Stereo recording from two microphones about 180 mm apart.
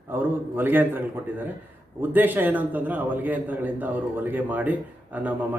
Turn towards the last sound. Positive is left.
turn(degrees=-10)  # may be behind; listen again after turning